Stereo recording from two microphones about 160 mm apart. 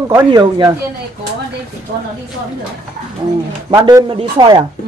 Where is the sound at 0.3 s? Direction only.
25° right (ahead or behind).